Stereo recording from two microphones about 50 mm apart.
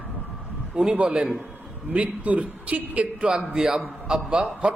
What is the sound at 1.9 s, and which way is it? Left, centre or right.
A man's voice, right.